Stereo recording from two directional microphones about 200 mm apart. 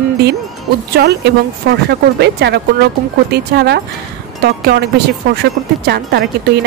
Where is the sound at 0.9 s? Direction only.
55° right (ahead or behind).